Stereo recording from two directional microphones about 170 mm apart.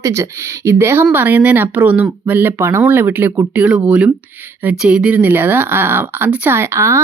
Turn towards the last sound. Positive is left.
turn(degrees=-15)  # may be behind; listen again after turning